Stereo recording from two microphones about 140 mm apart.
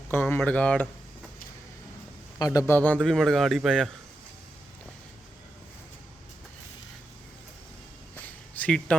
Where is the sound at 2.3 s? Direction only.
25° left (ahead or behind).